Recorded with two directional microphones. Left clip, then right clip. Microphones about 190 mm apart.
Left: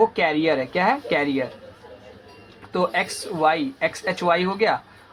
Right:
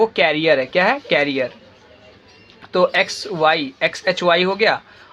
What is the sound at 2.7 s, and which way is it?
Speech, 25° right (ahead or behind).